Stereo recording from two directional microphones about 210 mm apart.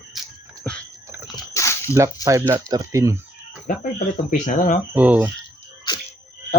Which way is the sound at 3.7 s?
40° left (ahead or behind).